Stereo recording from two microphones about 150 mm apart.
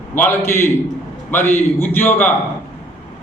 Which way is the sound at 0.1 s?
15° left (ahead or behind).